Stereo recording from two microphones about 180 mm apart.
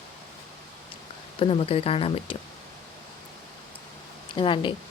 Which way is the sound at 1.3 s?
30° left (ahead or behind).